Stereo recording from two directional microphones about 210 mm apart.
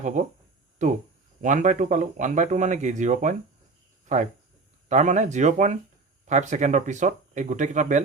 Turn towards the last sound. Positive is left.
turn(degrees=-35)  # may be behind; listen again after turning